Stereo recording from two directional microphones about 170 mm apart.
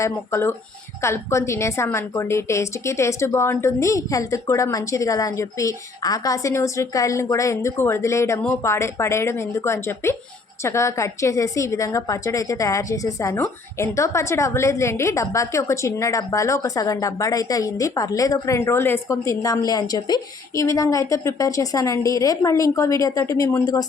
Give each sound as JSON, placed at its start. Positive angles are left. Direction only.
{"t": 0.0, "sound": "a woman's voice", "side_deg": 15}